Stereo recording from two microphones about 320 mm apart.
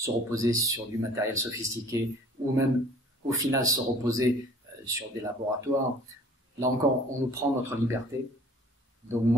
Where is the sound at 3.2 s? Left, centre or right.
Centre.